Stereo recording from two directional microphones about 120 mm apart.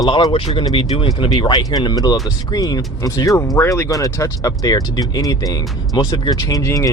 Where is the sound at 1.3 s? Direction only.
35° left (ahead or behind).